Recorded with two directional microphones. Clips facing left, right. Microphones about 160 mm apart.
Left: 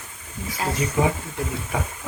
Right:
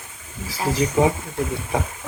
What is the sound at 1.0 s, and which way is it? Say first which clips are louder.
Speech: right 3 dB; 20° right (ahead or behind).